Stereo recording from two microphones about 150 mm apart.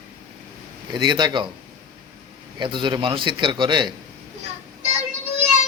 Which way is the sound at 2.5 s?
30° right (ahead or behind).